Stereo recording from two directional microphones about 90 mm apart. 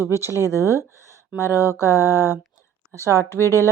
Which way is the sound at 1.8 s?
35° left (ahead or behind).